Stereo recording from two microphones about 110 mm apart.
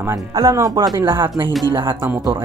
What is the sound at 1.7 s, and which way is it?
Speech, 45° right (ahead or behind).